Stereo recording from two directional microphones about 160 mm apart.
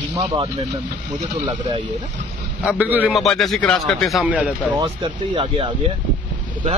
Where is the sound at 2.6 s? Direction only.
10° right (ahead or behind).